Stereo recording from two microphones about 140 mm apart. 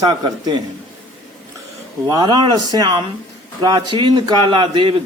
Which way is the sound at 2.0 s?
30° right (ahead or behind).